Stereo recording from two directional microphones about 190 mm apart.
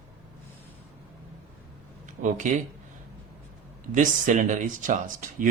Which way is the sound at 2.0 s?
40° right (ahead or behind).